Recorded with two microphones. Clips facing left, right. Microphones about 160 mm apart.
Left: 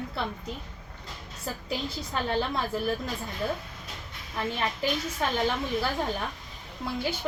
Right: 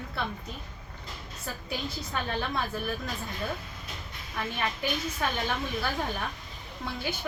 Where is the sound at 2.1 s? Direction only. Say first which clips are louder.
Left 4 dB; 30° left (ahead or behind).